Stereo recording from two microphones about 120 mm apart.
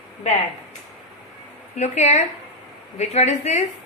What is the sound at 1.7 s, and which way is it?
A woman's voice, 70° left (ahead or behind).